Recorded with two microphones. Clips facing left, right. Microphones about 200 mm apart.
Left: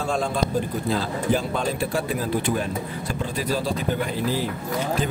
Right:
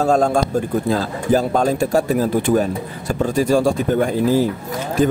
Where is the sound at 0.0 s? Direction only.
45° right (ahead or behind).